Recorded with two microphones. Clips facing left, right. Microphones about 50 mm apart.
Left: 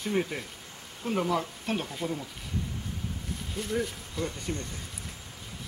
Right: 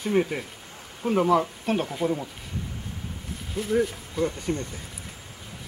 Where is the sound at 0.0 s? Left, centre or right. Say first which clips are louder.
Right 5 dB; centre.